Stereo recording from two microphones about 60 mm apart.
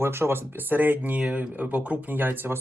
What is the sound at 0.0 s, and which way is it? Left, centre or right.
Speech, right.